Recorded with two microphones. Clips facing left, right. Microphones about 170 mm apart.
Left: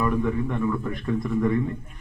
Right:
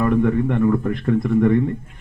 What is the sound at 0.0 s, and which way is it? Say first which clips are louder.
A man's voice: right 6 dB; 60° right (ahead or behind).